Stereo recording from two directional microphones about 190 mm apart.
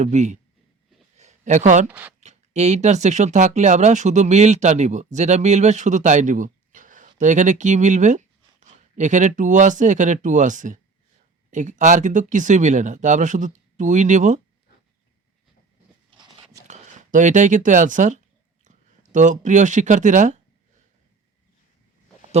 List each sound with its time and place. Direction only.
0.0 s speech: 40° right (ahead or behind)
1.1 s a sound: 40° right (ahead or behind)
1.9 s speech: 10° right (ahead or behind)
2.2 s speech: 35° right (ahead or behind)
16.0 s biting: 25° right (ahead or behind)
16.6 s speech: 40° right (ahead or behind)